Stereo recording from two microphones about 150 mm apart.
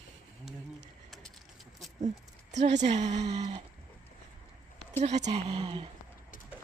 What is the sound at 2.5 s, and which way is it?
A woman's voice, 50° right (ahead or behind).